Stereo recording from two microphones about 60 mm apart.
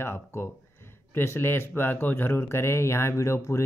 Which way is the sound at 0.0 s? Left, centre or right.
Left.